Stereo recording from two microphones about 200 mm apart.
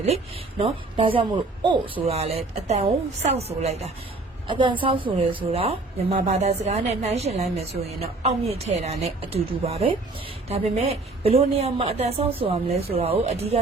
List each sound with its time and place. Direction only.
0.6 s a man's voice: 30° right (ahead or behind)